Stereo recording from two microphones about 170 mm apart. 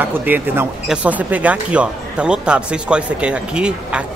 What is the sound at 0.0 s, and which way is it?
Speech, 10° right (ahead or behind).